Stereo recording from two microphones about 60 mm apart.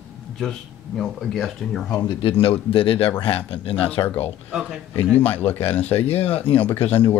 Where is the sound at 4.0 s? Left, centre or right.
Left.